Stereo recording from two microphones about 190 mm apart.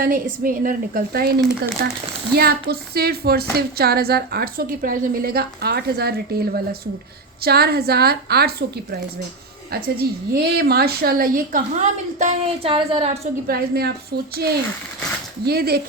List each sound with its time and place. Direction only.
0.0 s a woman's voice: 45° right (ahead or behind)
10.0 s a woman's voice: 55° right (ahead or behind)
12.2 s speech: 30° right (ahead or behind)
13.5 s a woman's voice: 55° right (ahead or behind)